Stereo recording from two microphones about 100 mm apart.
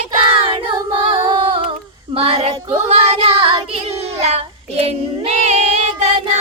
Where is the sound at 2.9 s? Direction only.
90° right.